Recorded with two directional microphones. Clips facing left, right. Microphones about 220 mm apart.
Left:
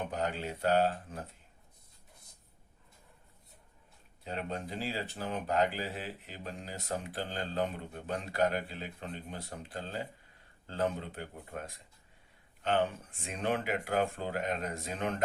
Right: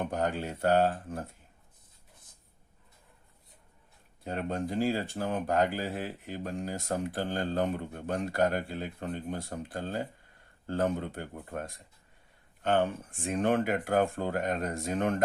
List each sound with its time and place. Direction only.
0.1 s speech: 50° right (ahead or behind)
4.2 s speech: 50° right (ahead or behind)